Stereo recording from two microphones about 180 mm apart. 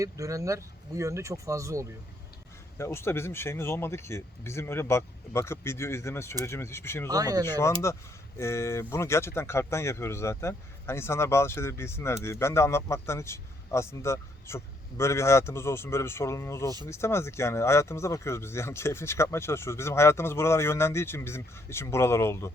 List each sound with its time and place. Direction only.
0.0 s speech: 15° right (ahead or behind)
2.7 s speech: 15° left (ahead or behind)
7.1 s speech: 20° right (ahead or behind)
7.4 s speech: 15° left (ahead or behind)